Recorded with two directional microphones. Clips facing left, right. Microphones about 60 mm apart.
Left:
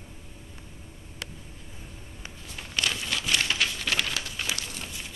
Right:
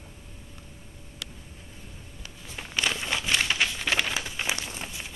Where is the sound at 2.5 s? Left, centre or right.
Centre.